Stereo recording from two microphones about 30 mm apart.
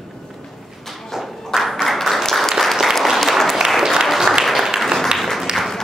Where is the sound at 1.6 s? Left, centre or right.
Centre.